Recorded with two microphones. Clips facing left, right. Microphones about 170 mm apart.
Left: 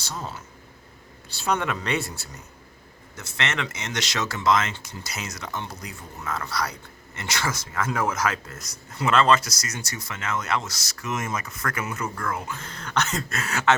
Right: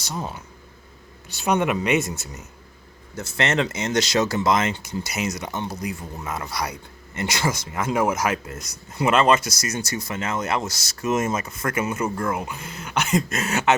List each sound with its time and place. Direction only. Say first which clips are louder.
0.0 s speech: right 4 dB; 15° right (ahead or behind)
3.2 s speech: right 7 dB; 30° right (ahead or behind)
4.7 s speech: right 8 dB; 20° right (ahead or behind)